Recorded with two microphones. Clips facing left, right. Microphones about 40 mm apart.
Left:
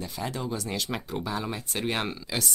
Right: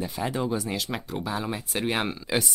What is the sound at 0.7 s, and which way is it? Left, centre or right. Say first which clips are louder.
Speech: right 1 dB; centre.